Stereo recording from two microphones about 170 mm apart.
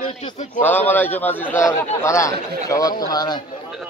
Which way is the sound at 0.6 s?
10° left (ahead or behind).